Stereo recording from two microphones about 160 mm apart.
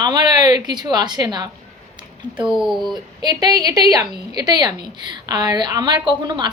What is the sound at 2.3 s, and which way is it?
Speech, 5° right (ahead or behind).